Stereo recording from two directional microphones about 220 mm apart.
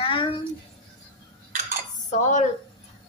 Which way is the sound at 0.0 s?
25° left (ahead or behind).